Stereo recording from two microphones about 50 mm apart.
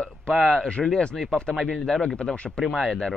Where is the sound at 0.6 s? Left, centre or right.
Centre.